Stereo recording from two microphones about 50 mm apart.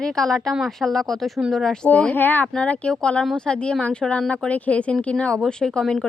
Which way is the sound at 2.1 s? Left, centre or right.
Left.